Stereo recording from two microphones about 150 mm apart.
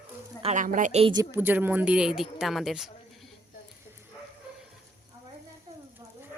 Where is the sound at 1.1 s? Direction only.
15° right (ahead or behind); by 3.3 s centre (ahead or behind).